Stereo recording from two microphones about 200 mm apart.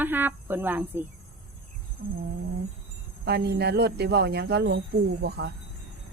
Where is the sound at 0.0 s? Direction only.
10° right (ahead or behind).